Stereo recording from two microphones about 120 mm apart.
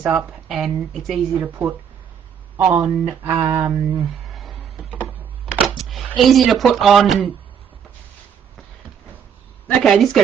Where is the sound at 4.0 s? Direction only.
Centre (ahead or behind).